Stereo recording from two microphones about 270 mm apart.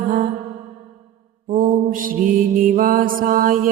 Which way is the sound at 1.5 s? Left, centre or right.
Right.